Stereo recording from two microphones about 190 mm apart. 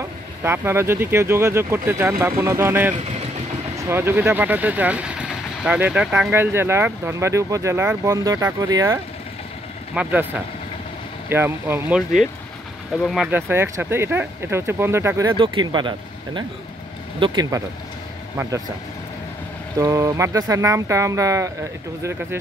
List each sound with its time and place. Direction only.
0.4 s speech: 15° right (ahead or behind)
13.0 s speech: centre (ahead or behind)
13.3 s speech: 10° right (ahead or behind)
17.2 s speech: 20° right (ahead or behind)
19.8 s speech: 15° right (ahead or behind)